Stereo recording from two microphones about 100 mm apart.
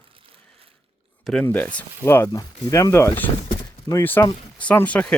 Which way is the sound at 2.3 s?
35° left (ahead or behind).